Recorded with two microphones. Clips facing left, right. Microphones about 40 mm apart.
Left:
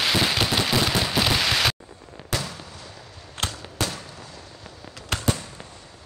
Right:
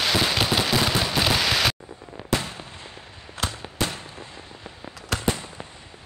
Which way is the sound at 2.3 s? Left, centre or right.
Right.